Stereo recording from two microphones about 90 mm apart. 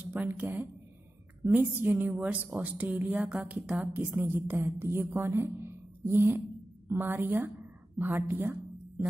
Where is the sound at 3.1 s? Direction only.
5° right (ahead or behind).